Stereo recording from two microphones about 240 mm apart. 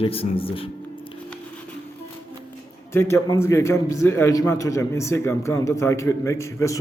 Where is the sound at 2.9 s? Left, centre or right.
Centre.